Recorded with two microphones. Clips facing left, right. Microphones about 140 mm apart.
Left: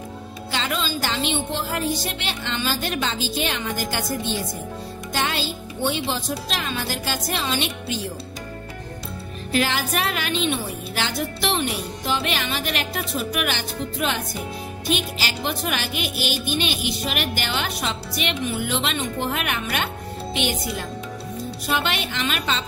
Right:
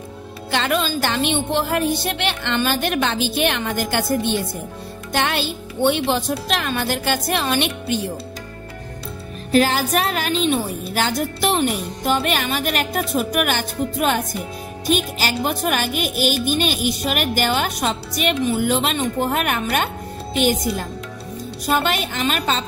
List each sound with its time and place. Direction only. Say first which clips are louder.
0.5 s speech: right 6 dB; 60° right (ahead or behind)
9.5 s speech: right 6 dB; 40° right (ahead or behind)
21.6 s speech: right 5 dB; 45° right (ahead or behind)